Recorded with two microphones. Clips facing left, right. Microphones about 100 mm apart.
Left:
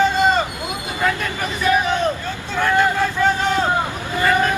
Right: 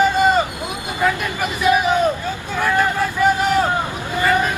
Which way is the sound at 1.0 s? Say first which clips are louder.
Right 2 dB; 15° right (ahead or behind).